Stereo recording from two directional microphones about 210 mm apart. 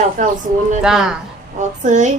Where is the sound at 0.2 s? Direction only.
35° right (ahead or behind).